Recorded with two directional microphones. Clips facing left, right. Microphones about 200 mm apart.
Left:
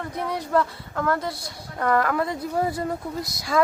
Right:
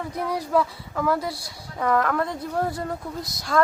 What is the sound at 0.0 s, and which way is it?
Speech, centre (ahead or behind).